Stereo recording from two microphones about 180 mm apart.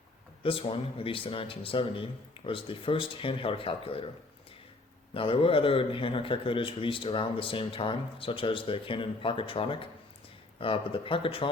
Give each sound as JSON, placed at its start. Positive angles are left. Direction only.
{"t": 0.4, "sound": "a man's voice", "side_deg": 30}
{"t": 5.1, "sound": "a man's voice", "side_deg": 30}